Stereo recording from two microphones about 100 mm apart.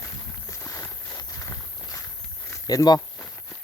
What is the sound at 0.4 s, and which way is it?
Walk, 30° left (ahead or behind).